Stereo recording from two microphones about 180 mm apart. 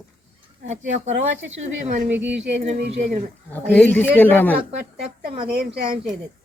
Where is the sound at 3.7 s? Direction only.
10° left (ahead or behind).